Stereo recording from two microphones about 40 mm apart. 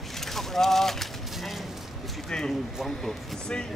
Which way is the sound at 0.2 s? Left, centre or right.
Centre.